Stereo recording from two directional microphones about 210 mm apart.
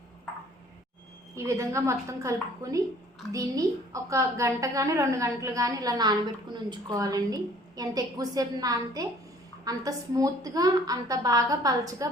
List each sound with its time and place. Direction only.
1.4 s a woman's voice: 15° right (ahead or behind)